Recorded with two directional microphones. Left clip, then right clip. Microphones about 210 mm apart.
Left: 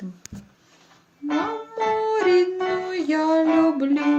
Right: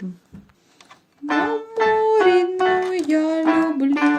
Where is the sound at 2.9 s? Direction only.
45° right (ahead or behind).